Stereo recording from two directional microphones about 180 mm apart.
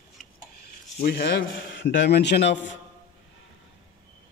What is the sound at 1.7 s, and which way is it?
Speech, 75° left (ahead or behind).